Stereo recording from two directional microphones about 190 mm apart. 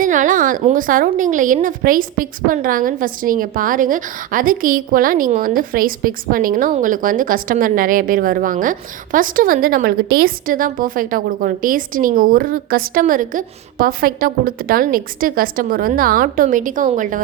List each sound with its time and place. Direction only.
0.0 s a woman's voice: 45° right (ahead or behind)